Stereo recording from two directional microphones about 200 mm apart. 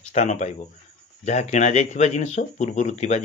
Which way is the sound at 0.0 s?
35° left (ahead or behind).